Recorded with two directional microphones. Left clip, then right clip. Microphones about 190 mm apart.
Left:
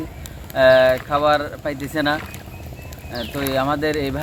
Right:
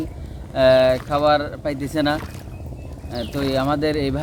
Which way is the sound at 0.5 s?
35° right (ahead or behind).